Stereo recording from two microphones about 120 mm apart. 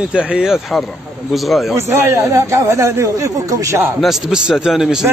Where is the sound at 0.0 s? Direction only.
10° right (ahead or behind).